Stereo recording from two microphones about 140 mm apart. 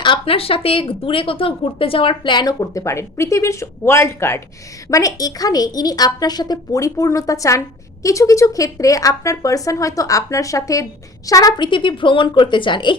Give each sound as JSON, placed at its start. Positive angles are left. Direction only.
{"t": 0.0, "sound": "a woman's voice", "side_deg": 40}